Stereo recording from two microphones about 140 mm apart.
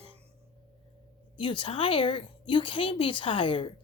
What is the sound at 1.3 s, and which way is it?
Speech, 35° left (ahead or behind).